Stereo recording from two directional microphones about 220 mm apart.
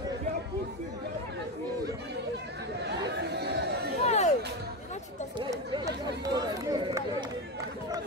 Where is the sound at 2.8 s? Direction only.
50° right (ahead or behind).